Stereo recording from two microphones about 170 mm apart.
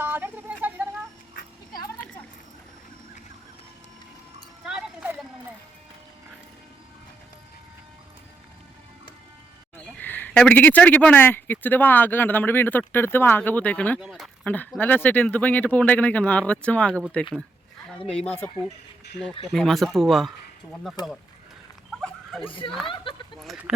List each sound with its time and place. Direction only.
0.0 s a sound: 10° right (ahead or behind)
4.6 s clip-clop: 5° right (ahead or behind)
10.0 s speech: 10° left (ahead or behind)
14.4 s speech: 10° left (ahead or behind)
18.3 s speech: 10° left (ahead or behind)
21.0 s speech: 20° left (ahead or behind)
22.0 s a sound: 5° left (ahead or behind)
23.4 s speech: centre (ahead or behind)